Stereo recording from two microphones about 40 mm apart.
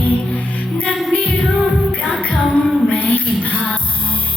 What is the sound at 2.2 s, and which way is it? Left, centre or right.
Music, left.